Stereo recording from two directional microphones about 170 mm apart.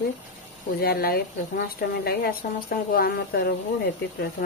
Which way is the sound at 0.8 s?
65° left (ahead or behind).